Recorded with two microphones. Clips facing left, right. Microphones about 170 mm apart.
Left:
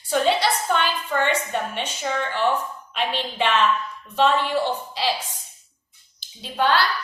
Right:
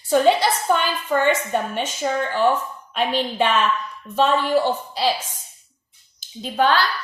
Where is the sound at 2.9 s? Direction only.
45° right (ahead or behind).